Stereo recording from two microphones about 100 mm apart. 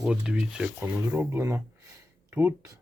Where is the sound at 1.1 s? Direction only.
25° right (ahead or behind).